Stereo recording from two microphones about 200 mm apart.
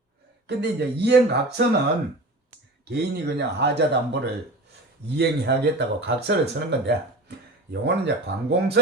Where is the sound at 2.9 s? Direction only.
55° right (ahead or behind).